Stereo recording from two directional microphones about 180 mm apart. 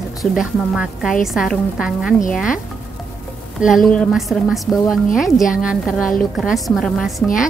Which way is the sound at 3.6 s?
Centre (ahead or behind).